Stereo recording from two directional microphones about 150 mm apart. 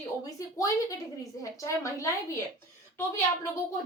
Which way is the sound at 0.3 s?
25° left (ahead or behind).